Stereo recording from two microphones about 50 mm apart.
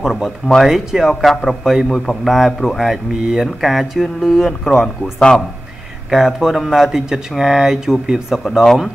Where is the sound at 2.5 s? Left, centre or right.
Centre.